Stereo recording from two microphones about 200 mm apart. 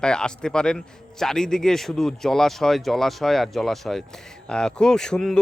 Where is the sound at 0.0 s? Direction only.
5° left (ahead or behind).